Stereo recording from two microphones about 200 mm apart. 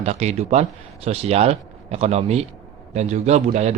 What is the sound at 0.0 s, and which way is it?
Speech, 30° right (ahead or behind).